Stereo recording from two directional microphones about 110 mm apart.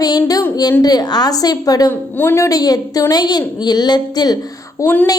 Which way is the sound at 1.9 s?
20° left (ahead or behind).